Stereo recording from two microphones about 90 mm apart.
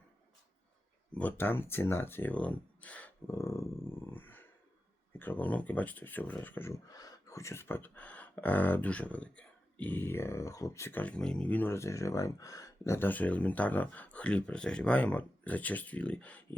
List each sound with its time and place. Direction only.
1.1 s speech: 20° left (ahead or behind)
3.2 s speech: 35° left (ahead or behind)
6.7 s speech: 40° left (ahead or behind)
11.0 s speech: 10° left (ahead or behind)
11.7 s speech: 35° left (ahead or behind)
13.1 s speech: 15° left (ahead or behind)